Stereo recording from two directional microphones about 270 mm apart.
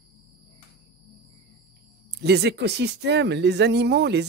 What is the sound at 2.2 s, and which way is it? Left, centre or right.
Speech, right.